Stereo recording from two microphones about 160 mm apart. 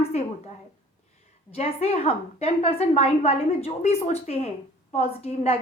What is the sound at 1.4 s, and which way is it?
A woman's voice, 40° left (ahead or behind).